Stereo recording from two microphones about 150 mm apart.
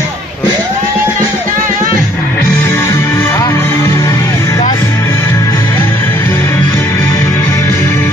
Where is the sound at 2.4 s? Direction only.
20° left (ahead or behind).